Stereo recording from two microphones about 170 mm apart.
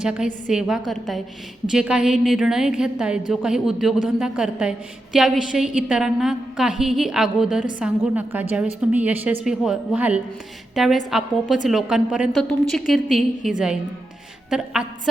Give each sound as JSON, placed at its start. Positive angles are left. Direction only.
{"t": 0.0, "sound": "a woman's voice", "side_deg": -5}